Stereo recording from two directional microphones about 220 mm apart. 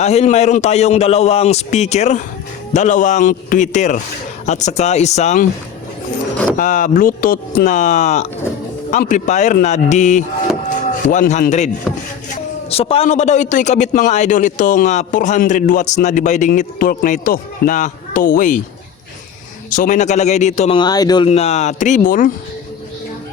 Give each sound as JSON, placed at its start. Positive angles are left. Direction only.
{"t": 0.0, "sound": "a man's voice", "side_deg": 30}
{"t": 6.6, "sound": "a man's voice", "side_deg": 35}
{"t": 12.7, "sound": "a man's voice", "side_deg": 25}
{"t": 19.7, "sound": "a man's voice", "side_deg": 35}
{"t": 21.2, "sound": "a man's voice", "side_deg": 30}